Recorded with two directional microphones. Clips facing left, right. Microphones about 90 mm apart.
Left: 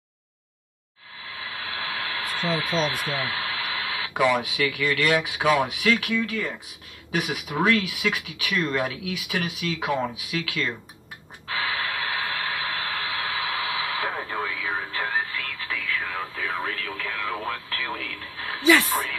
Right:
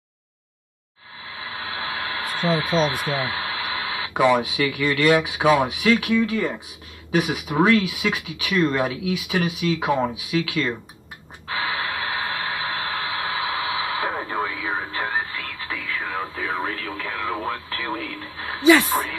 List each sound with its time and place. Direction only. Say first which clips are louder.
1.3 s a sound: right 3 dB; 25° right (ahead or behind)
2.8 s speech: right 4 dB; 25° right (ahead or behind)
10.4 s speech: right 4 dB; 20° right (ahead or behind)
11.4 s radio: right 2 dB; 25° right (ahead or behind)
14.2 s music: right 3 dB; 20° right (ahead or behind)